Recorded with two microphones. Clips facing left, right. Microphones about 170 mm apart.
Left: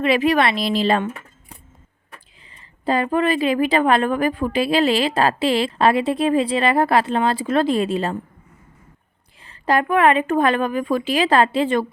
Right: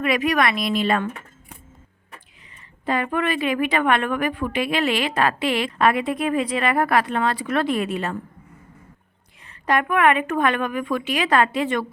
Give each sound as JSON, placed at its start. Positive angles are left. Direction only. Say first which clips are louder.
{"t": 0.0, "sound": "speech", "louder": "left 3 dB", "side_deg": 30}
{"t": 2.8, "sound": "a woman's voice", "louder": "left 4 dB", "side_deg": 30}
{"t": 9.5, "sound": "a woman's voice", "louder": "left 3 dB", "side_deg": 30}